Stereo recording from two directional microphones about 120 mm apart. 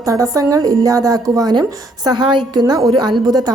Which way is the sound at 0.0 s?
30° right (ahead or behind).